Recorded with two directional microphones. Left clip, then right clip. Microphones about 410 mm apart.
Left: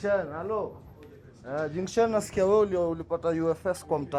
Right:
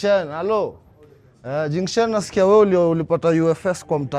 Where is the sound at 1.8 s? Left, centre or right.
Right.